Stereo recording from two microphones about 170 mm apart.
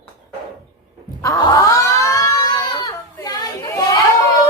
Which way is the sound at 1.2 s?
20° left (ahead or behind).